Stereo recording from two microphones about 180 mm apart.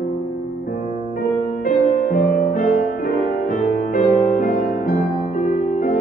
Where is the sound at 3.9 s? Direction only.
50° left (ahead or behind).